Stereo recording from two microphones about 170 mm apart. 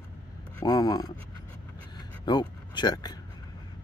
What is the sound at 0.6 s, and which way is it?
Speech, 25° left (ahead or behind).